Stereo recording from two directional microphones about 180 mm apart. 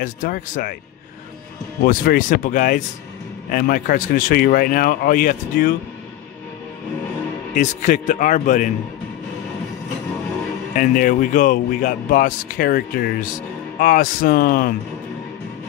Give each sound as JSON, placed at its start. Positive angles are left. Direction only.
{"t": 0.0, "sound": "speech", "side_deg": 50}
{"t": 1.9, "sound": "speech", "side_deg": 50}
{"t": 7.5, "sound": "speech", "side_deg": 45}
{"t": 10.7, "sound": "speech", "side_deg": 50}